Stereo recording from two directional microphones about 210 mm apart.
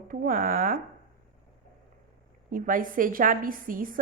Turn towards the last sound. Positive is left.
turn(degrees=-40)  # may be behind; listen again after turning